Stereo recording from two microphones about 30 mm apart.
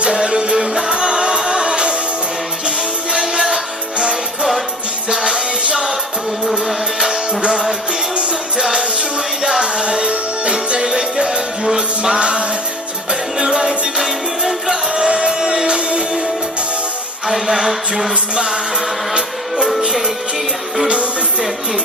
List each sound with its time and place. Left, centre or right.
0.0 s music: right; by 0.9 s centre
0.9 s music: right
5.0 s music: right
6.4 s music: centre
8.1 s music: right
8.5 s music: centre
9.6 s music: right
14.9 s music: right
17.2 s a sound: centre
18.3 s music: right